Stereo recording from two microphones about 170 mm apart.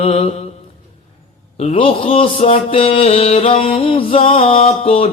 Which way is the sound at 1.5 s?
35° left (ahead or behind).